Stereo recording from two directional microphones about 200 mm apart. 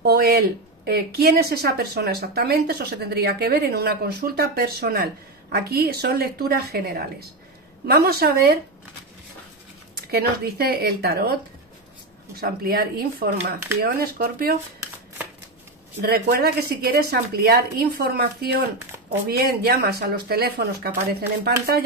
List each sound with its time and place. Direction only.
0.0 s speech: 50° right (ahead or behind)
9.9 s speech: 50° right (ahead or behind)
12.4 s speech: 50° right (ahead or behind)
16.0 s speech: 50° right (ahead or behind)